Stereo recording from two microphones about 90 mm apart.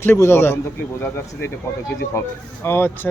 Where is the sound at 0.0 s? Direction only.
25° left (ahead or behind).